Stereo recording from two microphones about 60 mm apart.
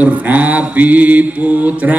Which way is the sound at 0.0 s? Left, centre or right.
Right.